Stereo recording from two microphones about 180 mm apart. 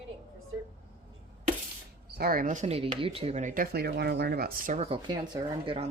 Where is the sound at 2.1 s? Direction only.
55° right (ahead or behind).